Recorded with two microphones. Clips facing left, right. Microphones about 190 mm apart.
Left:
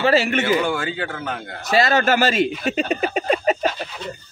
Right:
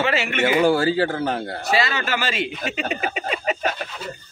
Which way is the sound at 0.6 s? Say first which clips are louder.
Right 6 dB; 40° right (ahead or behind).